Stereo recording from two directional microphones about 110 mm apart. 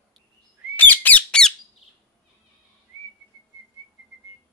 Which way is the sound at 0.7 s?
15° left (ahead or behind).